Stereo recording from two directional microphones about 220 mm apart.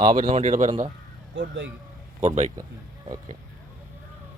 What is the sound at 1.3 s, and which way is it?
Speech, 55° right (ahead or behind).